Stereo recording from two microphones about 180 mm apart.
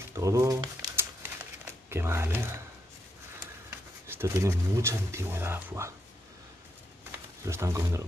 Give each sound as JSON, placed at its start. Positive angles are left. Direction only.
{"t": 0.1, "sound": "a sound", "side_deg": -20}
{"t": 1.9, "sound": "speech", "side_deg": -15}
{"t": 4.1, "sound": "speech", "side_deg": -15}
{"t": 7.1, "sound": "wild animals", "side_deg": -15}